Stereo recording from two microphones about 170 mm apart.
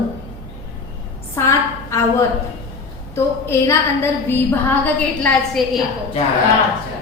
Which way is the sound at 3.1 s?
15° left (ahead or behind).